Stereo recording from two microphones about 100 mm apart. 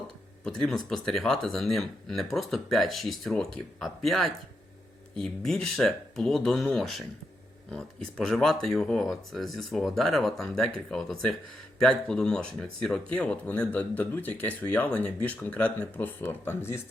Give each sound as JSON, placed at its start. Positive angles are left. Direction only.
{"t": 0.4, "sound": "speech", "side_deg": 5}